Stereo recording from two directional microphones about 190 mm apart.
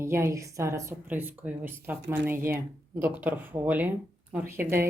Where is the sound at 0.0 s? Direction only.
15° right (ahead or behind).